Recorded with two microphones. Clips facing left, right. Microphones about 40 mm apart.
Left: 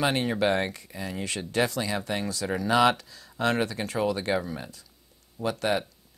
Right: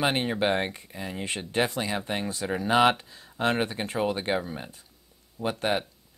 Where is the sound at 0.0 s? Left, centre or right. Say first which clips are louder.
Even; right.